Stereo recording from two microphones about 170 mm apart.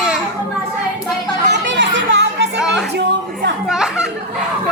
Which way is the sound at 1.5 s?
90° right.